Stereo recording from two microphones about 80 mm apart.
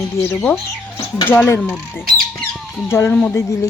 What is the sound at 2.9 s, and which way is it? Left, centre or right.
Speech, left.